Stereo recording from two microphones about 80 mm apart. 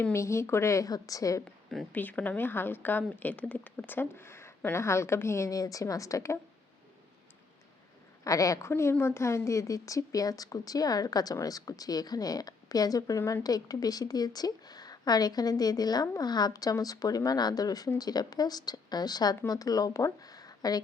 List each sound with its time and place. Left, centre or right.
0.1 s a woman's voice: left
1.9 s a woman's voice: centre; by 6.4 s left
8.2 s speech: left
8.7 s speech: left